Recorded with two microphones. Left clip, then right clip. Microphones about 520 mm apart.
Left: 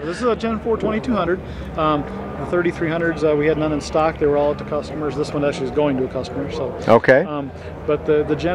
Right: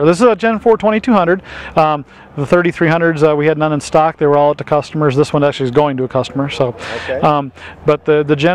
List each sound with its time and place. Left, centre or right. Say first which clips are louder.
0.0 s speech: right 11 dB; right
7.9 s speech: right 6 dB; right